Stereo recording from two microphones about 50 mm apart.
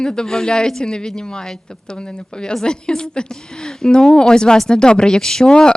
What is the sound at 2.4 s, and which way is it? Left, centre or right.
Speech, centre.